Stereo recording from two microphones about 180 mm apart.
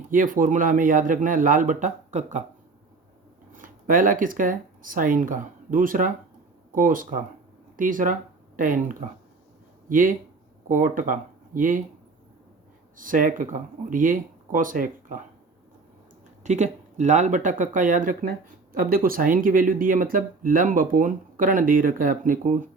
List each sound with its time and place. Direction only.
0.1 s speech: 50° right (ahead or behind)
3.5 s speech: 50° right (ahead or behind)
13.0 s speech: 50° right (ahead or behind)
16.4 s speech: 40° right (ahead or behind)